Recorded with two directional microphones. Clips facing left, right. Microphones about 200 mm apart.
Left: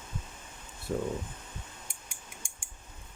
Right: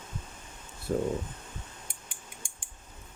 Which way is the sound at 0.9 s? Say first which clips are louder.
Right 3 dB; 45° right (ahead or behind).